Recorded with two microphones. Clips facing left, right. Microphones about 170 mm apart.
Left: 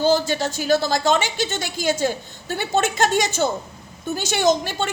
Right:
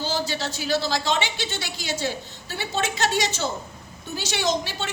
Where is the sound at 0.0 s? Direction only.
50° left (ahead or behind).